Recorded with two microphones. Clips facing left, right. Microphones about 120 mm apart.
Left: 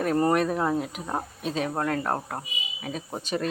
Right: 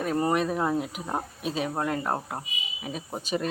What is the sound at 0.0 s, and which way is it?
Speech, 10° right (ahead or behind).